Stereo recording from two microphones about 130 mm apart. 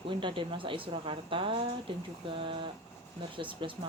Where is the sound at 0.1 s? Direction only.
40° right (ahead or behind).